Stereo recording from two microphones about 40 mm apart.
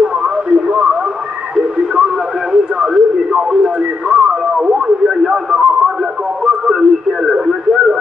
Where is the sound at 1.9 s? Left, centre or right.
Centre.